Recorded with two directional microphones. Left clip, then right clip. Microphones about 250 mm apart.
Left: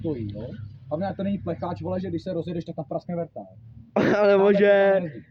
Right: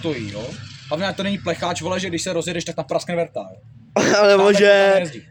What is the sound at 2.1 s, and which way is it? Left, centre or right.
A man's voice, centre.